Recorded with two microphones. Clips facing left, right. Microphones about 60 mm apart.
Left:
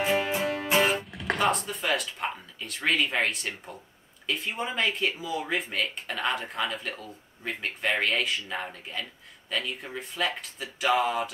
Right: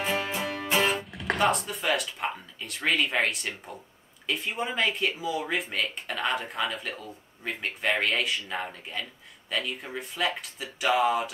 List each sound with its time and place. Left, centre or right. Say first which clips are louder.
0.0 s music: left 3 dB; centre
1.1 s speech: right 1 dB; centre